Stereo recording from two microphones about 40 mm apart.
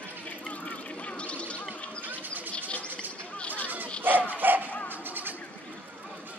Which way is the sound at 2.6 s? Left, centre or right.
Left.